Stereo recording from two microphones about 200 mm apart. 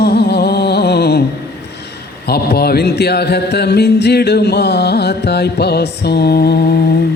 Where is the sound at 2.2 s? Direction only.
50° left (ahead or behind).